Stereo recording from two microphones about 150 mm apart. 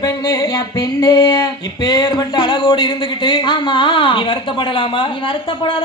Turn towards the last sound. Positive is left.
turn(degrees=35)  # may be behind; listen again after turning